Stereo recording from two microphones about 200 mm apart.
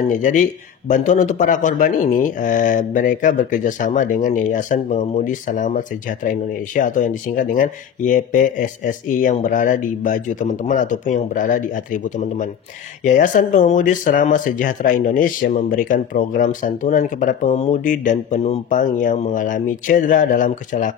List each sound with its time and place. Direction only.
0.1 s a man's voice: 40° left (ahead or behind)